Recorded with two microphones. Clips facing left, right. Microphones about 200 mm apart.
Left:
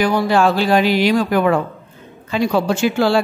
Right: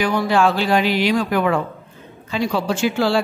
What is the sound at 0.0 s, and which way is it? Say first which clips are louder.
Speech: left 2 dB; 40° left (ahead or behind).